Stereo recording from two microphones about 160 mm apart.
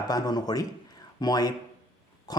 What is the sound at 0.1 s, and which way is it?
Speech, 25° left (ahead or behind).